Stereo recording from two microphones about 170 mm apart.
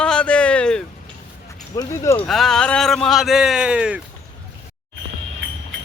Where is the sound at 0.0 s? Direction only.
5° left (ahead or behind).